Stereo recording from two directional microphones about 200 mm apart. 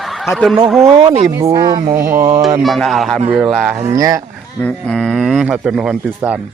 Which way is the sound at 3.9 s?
15° right (ahead or behind).